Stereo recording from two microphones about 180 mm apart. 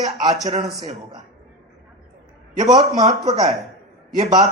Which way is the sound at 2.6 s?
20° right (ahead or behind).